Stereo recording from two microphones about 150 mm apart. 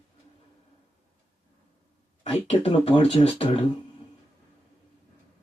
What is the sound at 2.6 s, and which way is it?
Speech, 45° left (ahead or behind).